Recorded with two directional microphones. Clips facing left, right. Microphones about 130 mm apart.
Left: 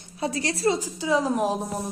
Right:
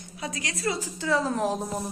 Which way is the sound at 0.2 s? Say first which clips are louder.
Left 7 dB; 30° left (ahead or behind).